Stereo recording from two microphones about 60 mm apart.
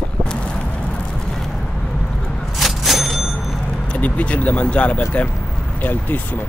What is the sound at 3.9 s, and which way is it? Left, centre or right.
Speech, left.